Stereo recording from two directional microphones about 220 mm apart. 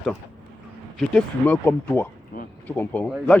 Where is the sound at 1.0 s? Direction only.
5° left (ahead or behind).